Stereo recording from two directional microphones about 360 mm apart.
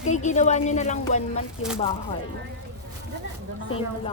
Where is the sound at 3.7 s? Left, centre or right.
Centre.